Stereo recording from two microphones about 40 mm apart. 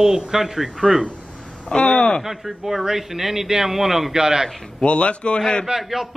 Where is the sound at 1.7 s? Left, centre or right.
Left.